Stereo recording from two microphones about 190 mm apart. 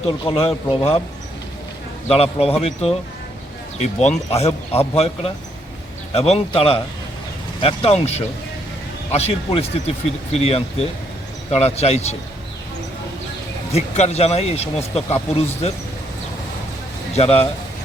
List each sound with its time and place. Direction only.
0.0 s speech: 30° left (ahead or behind)
2.0 s speech: 30° left (ahead or behind)
4.3 s speech: 30° left (ahead or behind)
13.7 s speech: 35° left (ahead or behind)
17.2 s speech: 30° left (ahead or behind)